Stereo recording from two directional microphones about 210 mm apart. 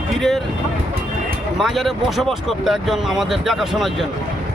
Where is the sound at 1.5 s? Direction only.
Centre (ahead or behind).